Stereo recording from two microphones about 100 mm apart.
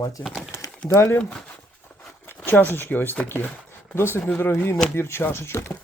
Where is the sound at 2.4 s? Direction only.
20° left (ahead or behind).